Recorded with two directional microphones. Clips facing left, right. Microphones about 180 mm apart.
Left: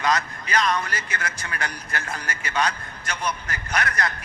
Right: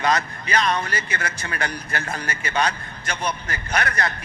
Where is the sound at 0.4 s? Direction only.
30° right (ahead or behind).